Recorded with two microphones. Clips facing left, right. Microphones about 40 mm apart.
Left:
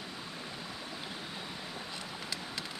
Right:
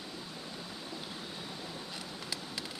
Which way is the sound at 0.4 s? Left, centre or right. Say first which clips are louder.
Left 1 dB; centre.